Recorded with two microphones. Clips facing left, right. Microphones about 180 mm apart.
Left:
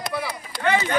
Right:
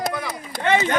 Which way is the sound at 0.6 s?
25° right (ahead or behind).